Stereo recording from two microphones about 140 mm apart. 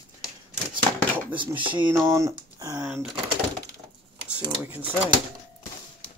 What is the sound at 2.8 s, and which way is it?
Speech, 10° right (ahead or behind).